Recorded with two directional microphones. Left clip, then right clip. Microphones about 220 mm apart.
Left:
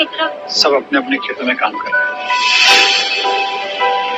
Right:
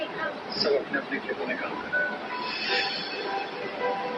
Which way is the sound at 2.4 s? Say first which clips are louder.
Left 19 dB; 45° left (ahead or behind).